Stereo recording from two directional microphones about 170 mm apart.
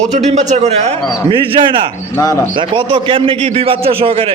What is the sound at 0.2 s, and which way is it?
Speech, 40° right (ahead or behind).